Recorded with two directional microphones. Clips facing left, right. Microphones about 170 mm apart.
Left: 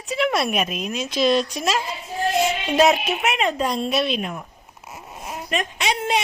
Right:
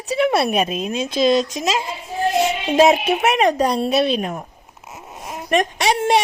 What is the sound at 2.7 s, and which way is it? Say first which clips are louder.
Music: right 4 dB; 25° right (ahead or behind).